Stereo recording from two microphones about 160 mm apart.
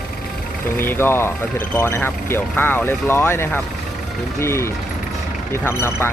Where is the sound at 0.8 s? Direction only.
15° left (ahead or behind).